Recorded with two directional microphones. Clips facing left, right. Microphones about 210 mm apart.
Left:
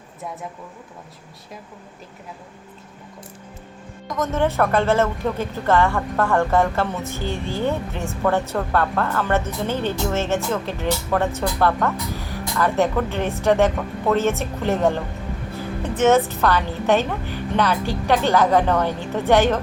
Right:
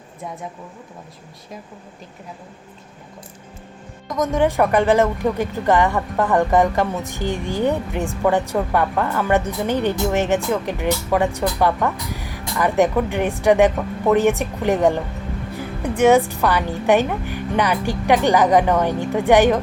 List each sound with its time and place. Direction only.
4.2 s speech: 15° right (ahead or behind)